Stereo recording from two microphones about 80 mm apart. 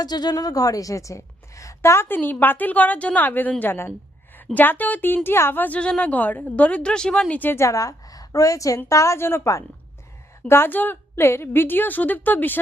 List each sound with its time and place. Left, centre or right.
0.0 s a woman's voice: left; by 7.3 s centre
7.3 s a woman's voice: left
7.6 s a woman's voice: left
10.5 s a woman's voice: left